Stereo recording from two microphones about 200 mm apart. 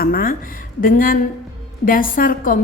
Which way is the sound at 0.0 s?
45° left (ahead or behind).